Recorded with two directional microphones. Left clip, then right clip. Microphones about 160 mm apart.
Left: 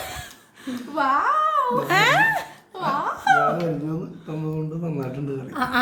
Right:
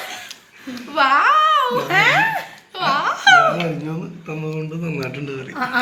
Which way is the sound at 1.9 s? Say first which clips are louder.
Right 2 dB; 20° left (ahead or behind).